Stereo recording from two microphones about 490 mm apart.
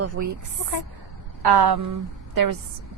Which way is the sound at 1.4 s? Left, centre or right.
Right.